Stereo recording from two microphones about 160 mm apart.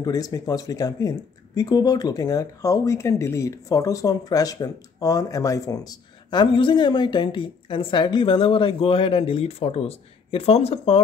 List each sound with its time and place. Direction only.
0.0 s speech: 25° left (ahead or behind); by 11.0 s 40° left (ahead or behind)